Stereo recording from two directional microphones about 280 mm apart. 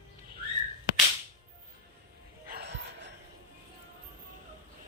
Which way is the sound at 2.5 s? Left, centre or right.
Right.